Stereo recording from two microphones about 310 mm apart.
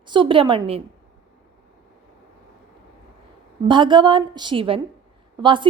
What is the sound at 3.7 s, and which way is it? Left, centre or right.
A woman's voice, centre.